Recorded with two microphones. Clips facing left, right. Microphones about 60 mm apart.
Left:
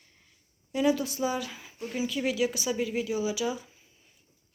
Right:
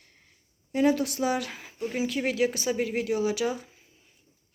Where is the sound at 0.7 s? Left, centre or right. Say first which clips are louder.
Right 2 dB; right.